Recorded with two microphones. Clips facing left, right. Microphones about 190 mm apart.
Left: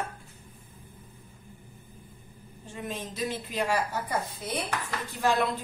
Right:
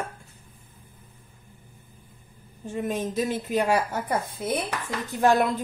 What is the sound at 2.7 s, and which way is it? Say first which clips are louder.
Speech: right 9 dB; 50° right (ahead or behind).